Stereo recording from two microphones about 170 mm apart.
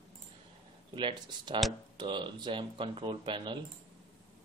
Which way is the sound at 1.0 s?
25° right (ahead or behind).